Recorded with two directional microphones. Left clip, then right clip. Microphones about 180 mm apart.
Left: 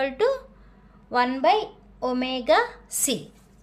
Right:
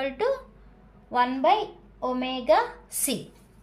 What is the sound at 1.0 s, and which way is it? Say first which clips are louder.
A woman's voice: left 1 dB; 40° left (ahead or behind).